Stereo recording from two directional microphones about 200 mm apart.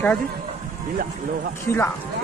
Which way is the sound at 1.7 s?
15° left (ahead or behind).